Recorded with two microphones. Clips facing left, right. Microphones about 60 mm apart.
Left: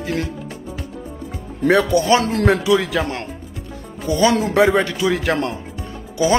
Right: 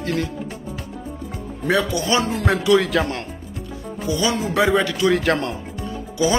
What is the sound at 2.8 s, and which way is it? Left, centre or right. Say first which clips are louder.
Speech: right 1 dB; centre.